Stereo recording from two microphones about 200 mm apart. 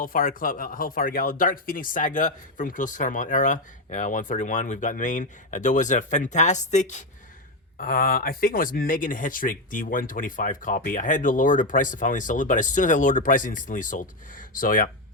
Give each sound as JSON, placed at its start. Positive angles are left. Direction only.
{"t": 0.0, "sound": "speech", "side_deg": 45}
{"t": 7.8, "sound": "speech", "side_deg": 45}